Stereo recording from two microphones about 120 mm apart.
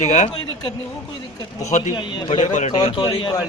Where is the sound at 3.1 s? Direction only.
45° left (ahead or behind).